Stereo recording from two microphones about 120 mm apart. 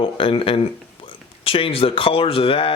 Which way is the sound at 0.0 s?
50° left (ahead or behind).